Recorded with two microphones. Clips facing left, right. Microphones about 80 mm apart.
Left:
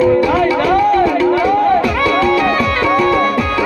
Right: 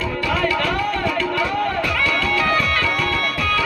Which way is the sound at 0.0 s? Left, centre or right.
Left.